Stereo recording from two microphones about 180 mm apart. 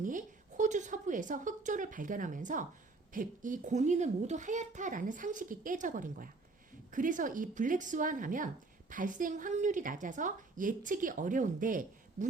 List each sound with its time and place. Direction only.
0.0 s a woman's voice: 45° right (ahead or behind)